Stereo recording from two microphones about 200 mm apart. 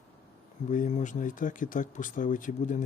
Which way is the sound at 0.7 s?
35° left (ahead or behind).